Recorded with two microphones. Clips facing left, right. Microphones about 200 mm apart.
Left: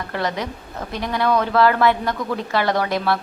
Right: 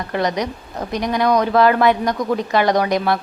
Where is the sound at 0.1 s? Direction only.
15° right (ahead or behind).